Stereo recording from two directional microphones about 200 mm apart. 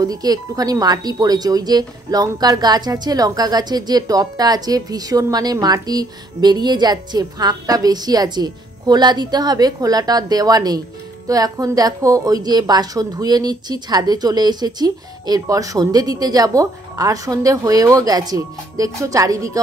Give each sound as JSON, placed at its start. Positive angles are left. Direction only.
{"t": 0.0, "sound": "a woman's voice", "side_deg": -20}